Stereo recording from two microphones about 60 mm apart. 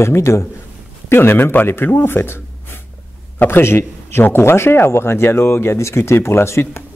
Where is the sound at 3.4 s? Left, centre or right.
Left.